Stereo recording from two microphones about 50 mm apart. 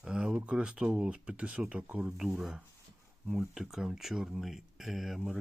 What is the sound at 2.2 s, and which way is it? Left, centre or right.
Speech, centre.